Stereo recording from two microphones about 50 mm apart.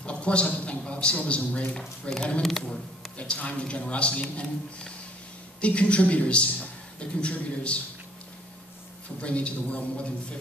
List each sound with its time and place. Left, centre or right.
0.0 s a man's voice: left
2.4 s speech: centre
3.2 s a man's voice: left
9.2 s a man's voice: left